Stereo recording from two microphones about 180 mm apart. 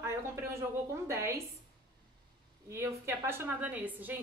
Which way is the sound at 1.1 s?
15° right (ahead or behind).